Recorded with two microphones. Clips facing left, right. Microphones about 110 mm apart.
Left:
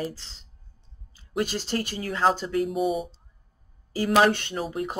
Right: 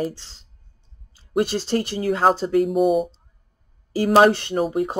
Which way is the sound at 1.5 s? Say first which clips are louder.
Right 6 dB; 40° right (ahead or behind).